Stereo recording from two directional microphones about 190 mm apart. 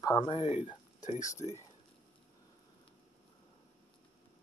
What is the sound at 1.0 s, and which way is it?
Speech, 40° left (ahead or behind).